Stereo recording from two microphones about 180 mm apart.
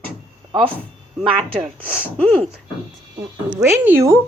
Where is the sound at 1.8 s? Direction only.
10° left (ahead or behind).